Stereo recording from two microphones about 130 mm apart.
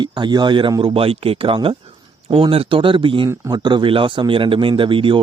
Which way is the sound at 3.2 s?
30° right (ahead or behind).